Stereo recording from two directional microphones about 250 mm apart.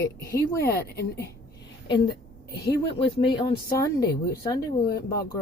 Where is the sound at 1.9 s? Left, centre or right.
Centre.